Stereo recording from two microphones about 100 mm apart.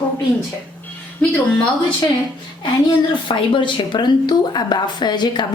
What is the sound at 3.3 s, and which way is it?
Speech, 55° left (ahead or behind).